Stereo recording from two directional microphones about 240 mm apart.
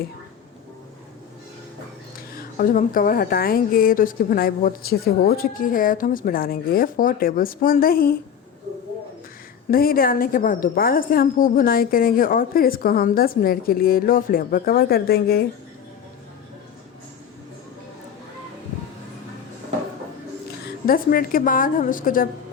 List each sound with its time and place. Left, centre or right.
2.6 s a woman's voice: left
9.6 s a woman's voice: left
20.8 s a woman's voice: left